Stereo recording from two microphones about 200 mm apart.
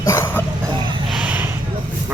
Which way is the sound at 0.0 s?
15° left (ahead or behind).